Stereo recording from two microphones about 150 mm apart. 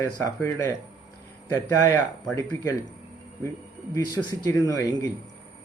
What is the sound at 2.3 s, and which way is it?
Speech, 20° left (ahead or behind).